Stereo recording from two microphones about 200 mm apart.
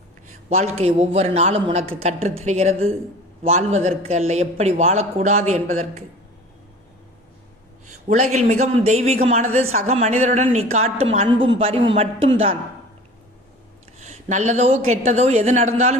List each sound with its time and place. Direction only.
0.5 s a woman's voice: 30° right (ahead or behind)
8.0 s a woman's voice: 35° right (ahead or behind)
14.0 s a woman's voice: 35° right (ahead or behind)